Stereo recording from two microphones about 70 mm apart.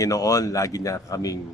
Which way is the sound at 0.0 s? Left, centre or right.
Left.